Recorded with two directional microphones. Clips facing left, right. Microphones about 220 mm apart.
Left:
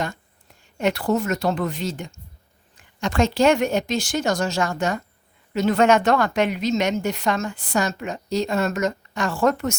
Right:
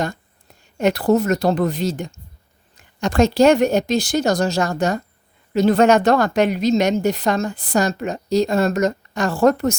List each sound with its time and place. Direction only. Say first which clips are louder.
0.8 s a woman's voice: right 5 dB; 40° right (ahead or behind)